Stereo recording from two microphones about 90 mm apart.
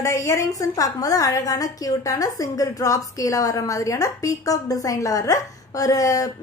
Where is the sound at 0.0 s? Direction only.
35° left (ahead or behind).